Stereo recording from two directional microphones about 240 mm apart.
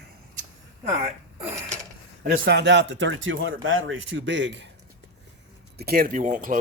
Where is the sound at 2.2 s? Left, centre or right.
Right.